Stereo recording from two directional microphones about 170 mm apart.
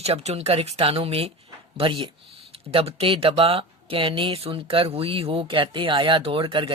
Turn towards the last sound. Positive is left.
turn(degrees=-30)  # may be behind; listen again after turning